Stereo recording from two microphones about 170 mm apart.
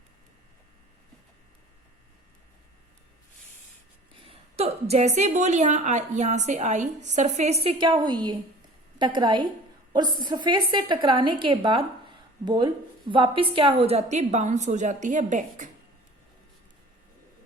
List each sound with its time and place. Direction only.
4.1 s a woman's voice: 35° right (ahead or behind)